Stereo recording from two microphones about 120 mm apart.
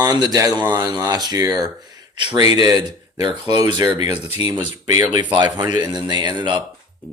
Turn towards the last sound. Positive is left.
turn(degrees=-40)  # may be behind; listen again after turning